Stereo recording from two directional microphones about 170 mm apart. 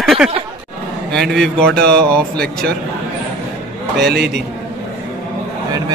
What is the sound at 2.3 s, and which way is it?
Speech, 70° right (ahead or behind).